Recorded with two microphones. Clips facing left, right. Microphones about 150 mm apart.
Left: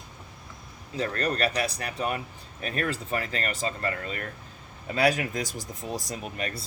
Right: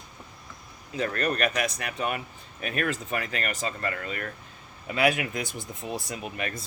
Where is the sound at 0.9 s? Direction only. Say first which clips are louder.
Even; 30° left (ahead or behind).